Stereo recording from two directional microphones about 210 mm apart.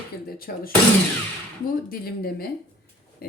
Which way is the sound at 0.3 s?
45° left (ahead or behind).